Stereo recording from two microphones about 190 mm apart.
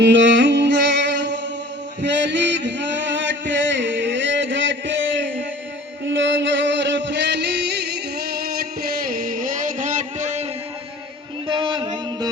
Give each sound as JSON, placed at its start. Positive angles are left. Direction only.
{"t": 0.0, "sound": "music", "side_deg": -70}
{"t": 2.0, "sound": "a sound", "side_deg": -70}
{"t": 6.1, "sound": "music", "side_deg": -75}
{"t": 11.4, "sound": "music", "side_deg": -25}